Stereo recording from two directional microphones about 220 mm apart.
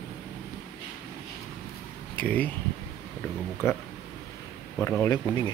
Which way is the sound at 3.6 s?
10° left (ahead or behind).